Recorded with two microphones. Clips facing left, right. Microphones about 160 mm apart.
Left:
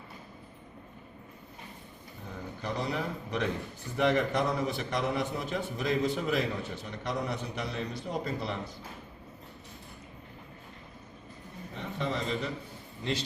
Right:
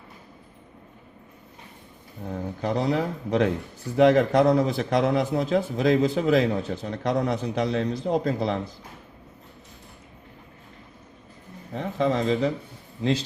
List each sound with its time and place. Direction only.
2.3 s a man's voice: 90° right
11.7 s a man's voice: 90° right